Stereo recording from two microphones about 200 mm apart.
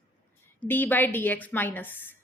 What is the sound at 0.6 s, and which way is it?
A woman's voice, 10° left (ahead or behind).